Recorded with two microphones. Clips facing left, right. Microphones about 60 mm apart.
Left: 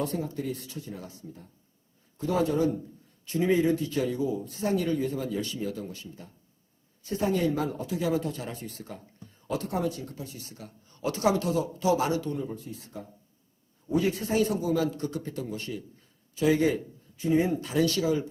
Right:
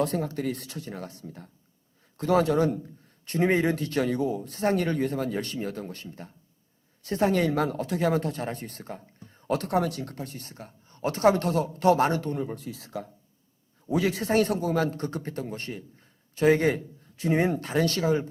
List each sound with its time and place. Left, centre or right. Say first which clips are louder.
0.0 s speech: right 4 dB; right
7.0 s speech: right 3 dB; right
13.9 s a man's voice: right 2 dB; right
17.2 s a man's voice: even; right